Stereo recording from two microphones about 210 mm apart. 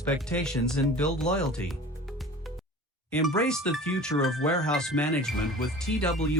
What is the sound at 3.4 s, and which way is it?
Speech, 5° left (ahead or behind).